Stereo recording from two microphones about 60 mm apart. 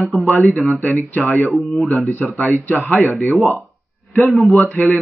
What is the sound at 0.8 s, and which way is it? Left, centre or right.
Speech, left.